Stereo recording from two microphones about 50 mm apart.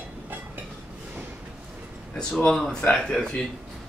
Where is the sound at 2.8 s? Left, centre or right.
Left.